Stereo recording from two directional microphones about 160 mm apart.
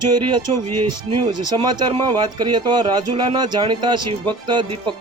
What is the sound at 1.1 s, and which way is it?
Speech, 30° right (ahead or behind).